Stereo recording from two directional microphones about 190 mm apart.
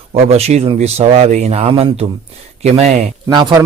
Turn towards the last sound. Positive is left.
turn(degrees=-20)  # may be behind; listen again after turning